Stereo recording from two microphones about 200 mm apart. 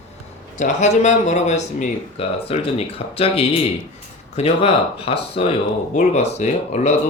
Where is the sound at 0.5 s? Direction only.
35° left (ahead or behind).